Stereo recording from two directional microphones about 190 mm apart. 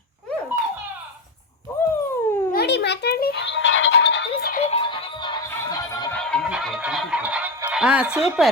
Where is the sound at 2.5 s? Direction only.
60° left (ahead or behind).